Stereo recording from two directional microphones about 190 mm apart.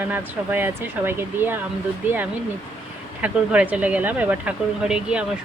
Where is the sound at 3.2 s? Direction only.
5° right (ahead or behind).